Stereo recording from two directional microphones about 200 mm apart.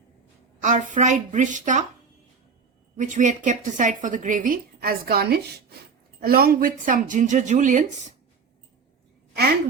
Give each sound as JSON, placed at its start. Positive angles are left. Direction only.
{"t": 0.6, "sound": "a woman's voice", "side_deg": -40}
{"t": 3.0, "sound": "a woman's voice", "side_deg": -40}